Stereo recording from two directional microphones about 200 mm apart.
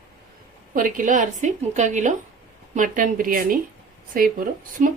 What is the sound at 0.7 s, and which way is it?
A woman's voice, 40° right (ahead or behind).